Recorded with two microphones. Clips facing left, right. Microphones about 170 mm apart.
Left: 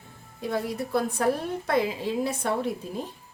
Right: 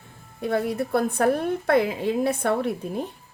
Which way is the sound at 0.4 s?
60° right (ahead or behind).